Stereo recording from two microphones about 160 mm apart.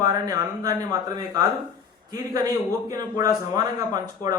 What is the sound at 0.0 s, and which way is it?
Speech, 25° right (ahead or behind).